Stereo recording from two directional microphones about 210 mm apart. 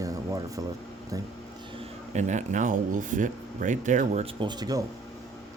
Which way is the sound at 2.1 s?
35° right (ahead or behind).